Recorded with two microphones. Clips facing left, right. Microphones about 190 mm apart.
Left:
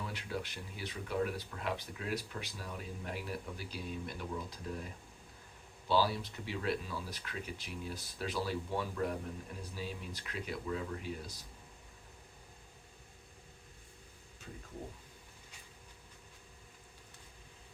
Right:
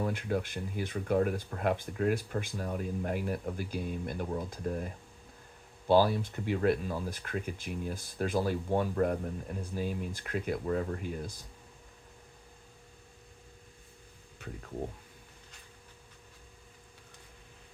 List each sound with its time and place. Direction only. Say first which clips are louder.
0.0 s speech: right 9 dB; 50° right (ahead or behind)
5.9 s speech: right 7 dB; 50° right (ahead or behind)
14.4 s speech: right 6 dB; 65° right (ahead or behind)